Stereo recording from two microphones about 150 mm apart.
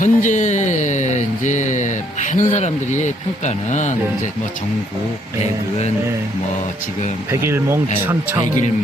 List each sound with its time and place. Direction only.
0.0 s a sound: 55° left (ahead or behind)
2.3 s speech: 50° left (ahead or behind)
7.3 s speech: 15° right (ahead or behind)